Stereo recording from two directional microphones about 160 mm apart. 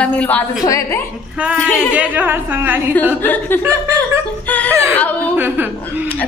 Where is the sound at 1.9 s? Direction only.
10° right (ahead or behind).